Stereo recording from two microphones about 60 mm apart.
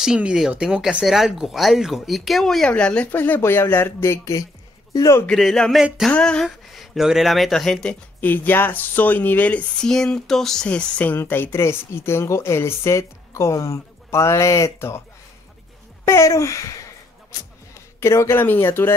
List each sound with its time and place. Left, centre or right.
0.0 s speech: centre
2.7 s speech: left
3.2 s speech: left
5.7 s speech: centre
6.1 s speech: centre
6.4 s speech: centre
8.2 s speech: left
9.8 s speech: centre
10.7 s speech: left
11.1 s speech: left
11.5 s speech: left
16.1 s speech: left
18.0 s speech: left
18.4 s speech: left